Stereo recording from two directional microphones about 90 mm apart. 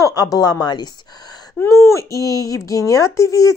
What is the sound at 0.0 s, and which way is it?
Speech, 45° left (ahead or behind).